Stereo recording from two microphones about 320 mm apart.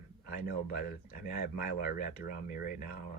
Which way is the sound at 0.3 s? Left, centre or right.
Left.